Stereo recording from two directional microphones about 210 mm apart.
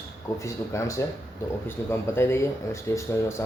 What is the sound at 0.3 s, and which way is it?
Speech, 15° left (ahead or behind).